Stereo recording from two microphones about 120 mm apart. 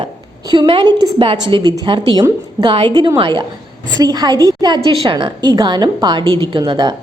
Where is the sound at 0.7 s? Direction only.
45° right (ahead or behind).